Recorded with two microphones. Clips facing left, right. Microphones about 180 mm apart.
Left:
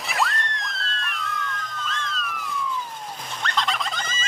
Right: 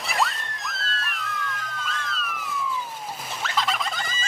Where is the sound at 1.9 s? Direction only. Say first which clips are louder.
Left 1 dB; 5° right (ahead or behind).